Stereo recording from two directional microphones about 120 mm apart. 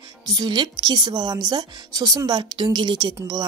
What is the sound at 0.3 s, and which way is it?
A woman's voice, 35° right (ahead or behind).